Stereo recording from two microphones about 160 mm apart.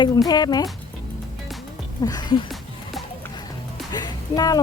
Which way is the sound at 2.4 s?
Centre (ahead or behind).